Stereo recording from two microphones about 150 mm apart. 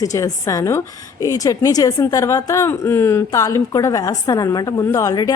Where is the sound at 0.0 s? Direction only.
25° left (ahead or behind).